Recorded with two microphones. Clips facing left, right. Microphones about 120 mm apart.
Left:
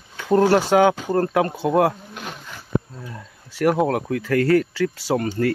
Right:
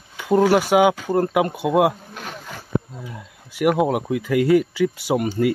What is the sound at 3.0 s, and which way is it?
Speech, 10° right (ahead or behind).